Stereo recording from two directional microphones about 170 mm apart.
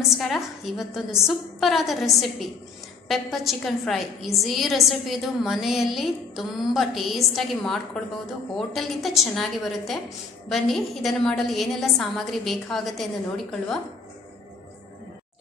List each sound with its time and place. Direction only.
0.2 s a woman's voice: centre (ahead or behind)